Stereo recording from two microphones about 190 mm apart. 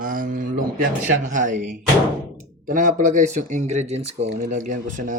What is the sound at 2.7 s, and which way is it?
Speech, 45° right (ahead or behind).